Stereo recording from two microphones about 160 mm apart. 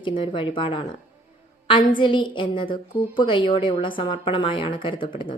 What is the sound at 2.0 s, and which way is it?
Speech, 30° left (ahead or behind).